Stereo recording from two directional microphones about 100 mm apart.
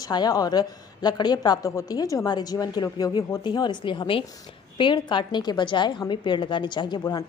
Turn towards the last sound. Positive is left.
turn(degrees=50)  # may be behind; listen again after turning